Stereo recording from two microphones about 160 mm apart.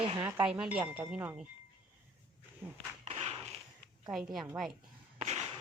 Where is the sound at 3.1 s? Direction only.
40° right (ahead or behind).